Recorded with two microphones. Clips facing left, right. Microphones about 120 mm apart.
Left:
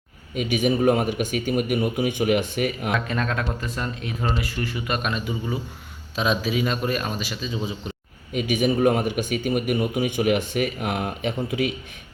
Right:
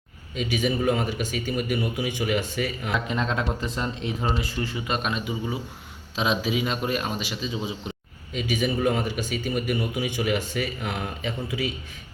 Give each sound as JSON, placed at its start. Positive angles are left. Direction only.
{"t": 0.3, "sound": "a man's voice", "side_deg": 50}
{"t": 2.9, "sound": "speech", "side_deg": -20}
{"t": 8.3, "sound": "a man's voice", "side_deg": 55}